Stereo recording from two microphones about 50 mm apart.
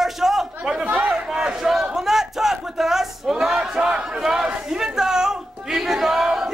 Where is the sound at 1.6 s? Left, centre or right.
Centre.